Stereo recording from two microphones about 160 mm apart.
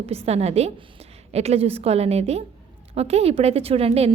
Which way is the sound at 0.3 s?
40° right (ahead or behind).